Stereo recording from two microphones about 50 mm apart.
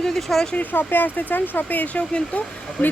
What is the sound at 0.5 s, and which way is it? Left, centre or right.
Speech, left.